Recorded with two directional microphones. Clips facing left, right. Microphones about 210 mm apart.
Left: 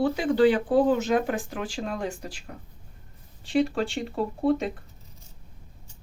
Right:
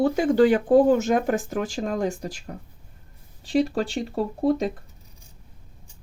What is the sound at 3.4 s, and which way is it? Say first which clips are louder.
Speech: right 2 dB; 40° right (ahead or behind).